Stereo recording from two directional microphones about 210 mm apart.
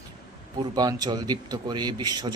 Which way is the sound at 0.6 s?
20° right (ahead or behind).